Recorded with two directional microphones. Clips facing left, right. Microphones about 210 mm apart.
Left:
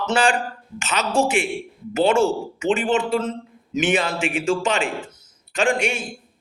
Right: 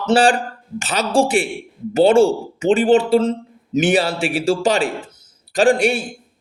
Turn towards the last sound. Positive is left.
turn(degrees=-35)  # may be behind; listen again after turning